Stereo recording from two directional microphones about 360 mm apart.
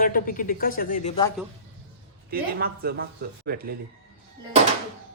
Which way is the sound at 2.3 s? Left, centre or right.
Right.